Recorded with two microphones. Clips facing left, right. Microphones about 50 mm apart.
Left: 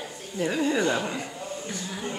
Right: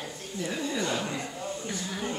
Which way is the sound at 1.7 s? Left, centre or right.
Centre.